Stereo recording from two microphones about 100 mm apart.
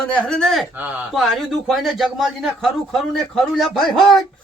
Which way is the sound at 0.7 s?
15° right (ahead or behind).